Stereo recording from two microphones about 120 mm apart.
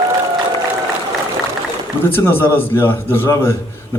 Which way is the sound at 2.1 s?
20° left (ahead or behind).